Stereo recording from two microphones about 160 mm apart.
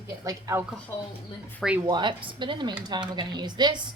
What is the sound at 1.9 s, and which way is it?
Speech, 30° right (ahead or behind).